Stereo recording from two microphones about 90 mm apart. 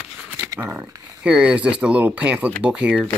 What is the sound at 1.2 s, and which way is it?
Speech, 10° right (ahead or behind).